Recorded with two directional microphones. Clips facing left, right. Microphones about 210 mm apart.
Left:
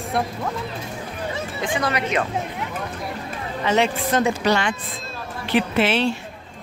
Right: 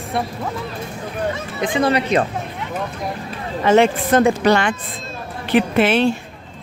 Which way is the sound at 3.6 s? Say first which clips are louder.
Right 6 dB; 50° right (ahead or behind).